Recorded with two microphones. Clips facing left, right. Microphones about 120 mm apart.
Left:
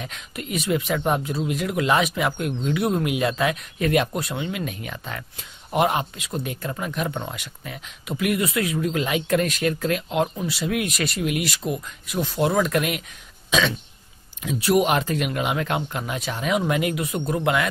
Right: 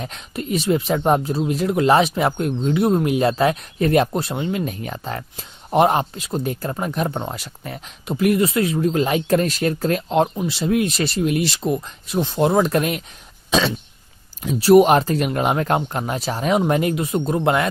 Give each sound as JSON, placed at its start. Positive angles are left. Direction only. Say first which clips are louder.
{"t": 0.0, "sound": "speech", "louder": "right 5 dB", "side_deg": -35}
{"t": 13.5, "sound": "throat clearing", "louder": "right 3 dB", "side_deg": -35}
{"t": 14.4, "sound": "speech", "louder": "right 8 dB", "side_deg": -35}